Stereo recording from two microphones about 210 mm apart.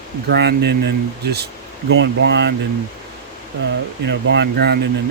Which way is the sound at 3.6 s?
60° right (ahead or behind).